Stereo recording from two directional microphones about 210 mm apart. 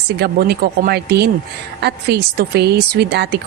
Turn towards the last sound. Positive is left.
turn(degrees=-50)  # may be behind; listen again after turning